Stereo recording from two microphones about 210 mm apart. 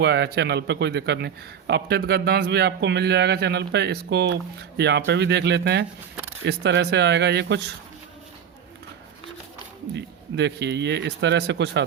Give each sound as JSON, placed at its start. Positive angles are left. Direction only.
{"t": 0.0, "sound": "a man's voice", "side_deg": -55}
{"t": 9.9, "sound": "speech", "side_deg": -55}